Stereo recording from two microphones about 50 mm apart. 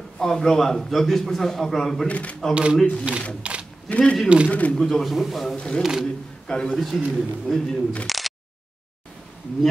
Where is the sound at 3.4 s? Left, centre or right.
Right.